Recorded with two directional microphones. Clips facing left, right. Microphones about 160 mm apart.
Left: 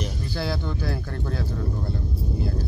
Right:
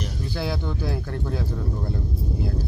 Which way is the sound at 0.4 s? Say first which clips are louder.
Even; 15° right (ahead or behind).